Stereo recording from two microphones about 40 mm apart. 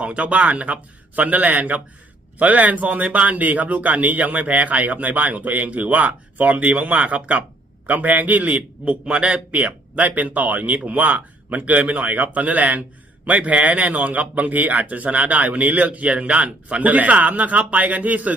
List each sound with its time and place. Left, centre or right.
0.0 s speech: right